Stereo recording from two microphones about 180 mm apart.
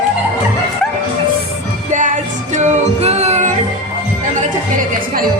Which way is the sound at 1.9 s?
45° right (ahead or behind).